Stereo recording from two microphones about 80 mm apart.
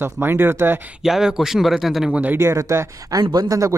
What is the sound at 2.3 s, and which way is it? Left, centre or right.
Speech, right.